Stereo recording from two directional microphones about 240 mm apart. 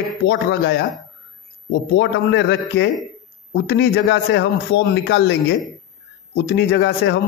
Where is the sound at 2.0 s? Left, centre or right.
Left.